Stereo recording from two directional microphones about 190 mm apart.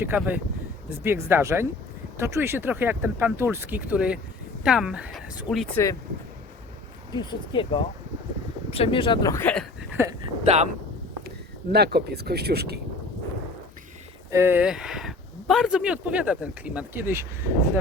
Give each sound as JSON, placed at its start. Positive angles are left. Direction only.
{"t": 0.0, "sound": "speech", "side_deg": -10}
{"t": 5.7, "sound": "speech", "side_deg": 15}
{"t": 7.1, "sound": "speech", "side_deg": 25}
{"t": 9.3, "sound": "speech", "side_deg": 10}
{"t": 9.9, "sound": "speech", "side_deg": -15}
{"t": 10.4, "sound": "speech", "side_deg": -35}
{"t": 11.7, "sound": "speech", "side_deg": -55}
{"t": 14.3, "sound": "speech", "side_deg": -15}